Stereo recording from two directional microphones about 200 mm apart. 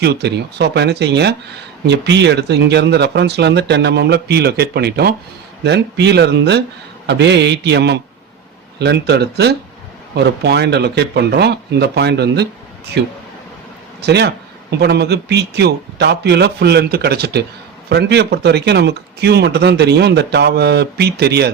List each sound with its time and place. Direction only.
0.0 s a man's voice: 55° right (ahead or behind)